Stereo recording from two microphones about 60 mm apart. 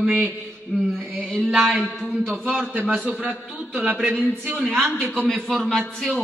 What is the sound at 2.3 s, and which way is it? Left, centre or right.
Speech, right.